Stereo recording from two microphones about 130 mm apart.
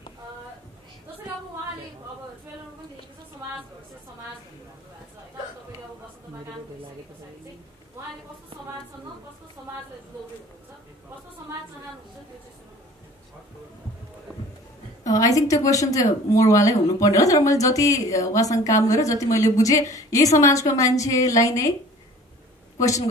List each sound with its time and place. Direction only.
15.0 s a woman's voice: 25° left (ahead or behind)
22.8 s a woman's voice: 25° left (ahead or behind)